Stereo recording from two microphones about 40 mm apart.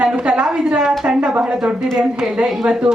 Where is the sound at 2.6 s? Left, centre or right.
Right.